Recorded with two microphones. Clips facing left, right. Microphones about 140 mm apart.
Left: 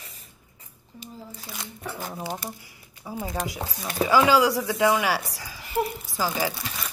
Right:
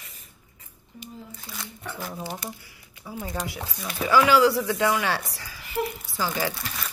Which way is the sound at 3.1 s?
5° left (ahead or behind).